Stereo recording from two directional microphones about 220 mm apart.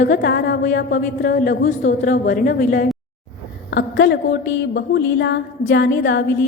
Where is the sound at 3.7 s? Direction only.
50° left (ahead or behind).